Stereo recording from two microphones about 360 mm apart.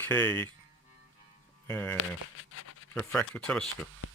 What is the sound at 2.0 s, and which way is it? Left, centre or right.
Speech, left.